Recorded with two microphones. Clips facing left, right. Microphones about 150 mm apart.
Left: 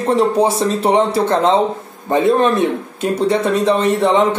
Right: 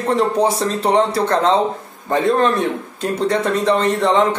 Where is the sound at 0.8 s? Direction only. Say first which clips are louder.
Left 1 dB; 20° left (ahead or behind).